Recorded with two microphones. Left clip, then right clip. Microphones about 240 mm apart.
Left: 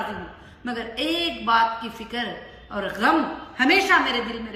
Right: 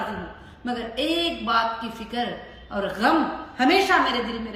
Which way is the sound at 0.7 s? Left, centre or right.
Centre.